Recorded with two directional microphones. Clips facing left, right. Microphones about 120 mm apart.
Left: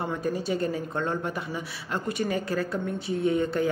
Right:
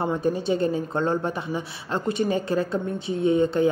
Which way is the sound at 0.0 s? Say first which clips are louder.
Right 5 dB; 25° right (ahead or behind).